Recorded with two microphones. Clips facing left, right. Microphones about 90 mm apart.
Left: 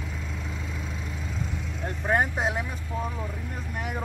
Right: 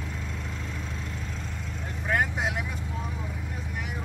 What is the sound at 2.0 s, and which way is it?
Vehicle, 30° left (ahead or behind).